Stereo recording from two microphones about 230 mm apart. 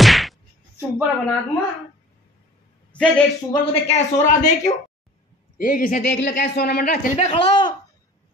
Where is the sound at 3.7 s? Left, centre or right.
Left.